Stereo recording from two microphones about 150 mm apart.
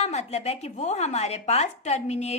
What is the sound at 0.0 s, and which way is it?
Speech, 45° left (ahead or behind).